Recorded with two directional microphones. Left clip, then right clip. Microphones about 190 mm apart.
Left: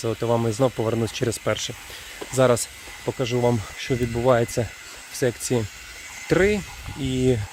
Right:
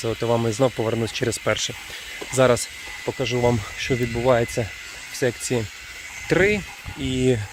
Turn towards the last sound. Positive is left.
turn(degrees=10)  # may be behind; listen again after turning